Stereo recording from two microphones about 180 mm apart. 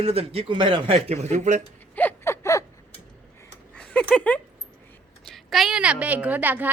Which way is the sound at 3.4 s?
5° left (ahead or behind).